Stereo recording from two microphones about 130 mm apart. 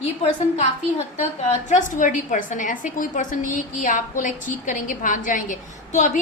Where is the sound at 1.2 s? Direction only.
70° left (ahead or behind).